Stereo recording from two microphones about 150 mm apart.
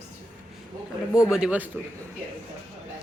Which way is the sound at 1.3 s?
5° right (ahead or behind).